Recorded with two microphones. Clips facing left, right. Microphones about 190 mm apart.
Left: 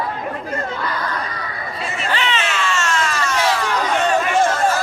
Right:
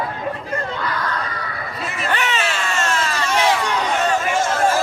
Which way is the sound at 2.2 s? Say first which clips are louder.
Left 1 dB; 45° right (ahead or behind).